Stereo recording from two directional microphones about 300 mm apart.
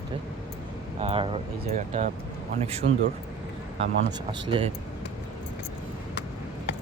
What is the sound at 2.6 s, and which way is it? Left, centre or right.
Speech, right.